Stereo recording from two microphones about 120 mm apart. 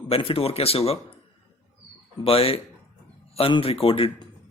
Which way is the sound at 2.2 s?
50° left (ahead or behind).